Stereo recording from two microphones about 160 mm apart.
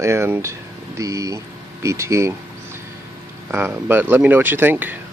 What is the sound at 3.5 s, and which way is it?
Speech, 15° right (ahead or behind).